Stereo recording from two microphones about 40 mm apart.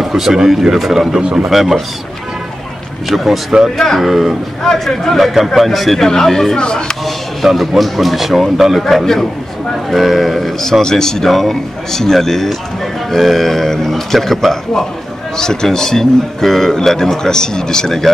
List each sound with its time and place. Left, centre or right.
0.0 s speech: centre
3.1 s speech: centre
3.7 s speech: centre
4.0 s speech: centre
4.6 s speech: centre
5.1 s speech: centre
6.0 s speech: centre
6.6 s speech: left
7.1 s speech: centre
8.8 s speech: centre
11.2 s speech: centre